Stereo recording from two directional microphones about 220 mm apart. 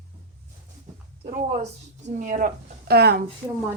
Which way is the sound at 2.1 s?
35° right (ahead or behind).